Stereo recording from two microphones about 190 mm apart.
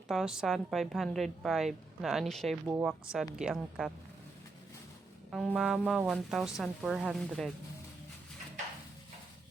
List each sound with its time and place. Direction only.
0.1 s a woman's voice: 5° right (ahead or behind)
5.3 s a woman's voice: centre (ahead or behind)